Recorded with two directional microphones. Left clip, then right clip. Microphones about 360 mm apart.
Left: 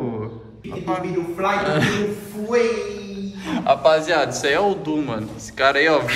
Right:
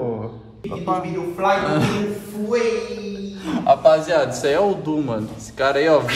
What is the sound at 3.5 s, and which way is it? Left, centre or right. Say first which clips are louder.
A man's voice: right 2 dB; centre.